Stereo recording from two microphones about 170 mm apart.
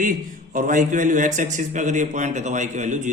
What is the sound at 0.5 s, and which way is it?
A man's voice, 50° right (ahead or behind).